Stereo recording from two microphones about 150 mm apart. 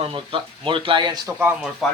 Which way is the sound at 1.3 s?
10° right (ahead or behind).